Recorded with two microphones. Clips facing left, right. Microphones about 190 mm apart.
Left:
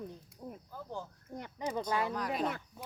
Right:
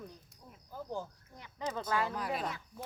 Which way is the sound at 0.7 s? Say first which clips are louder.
Right 5 dB; 10° right (ahead or behind).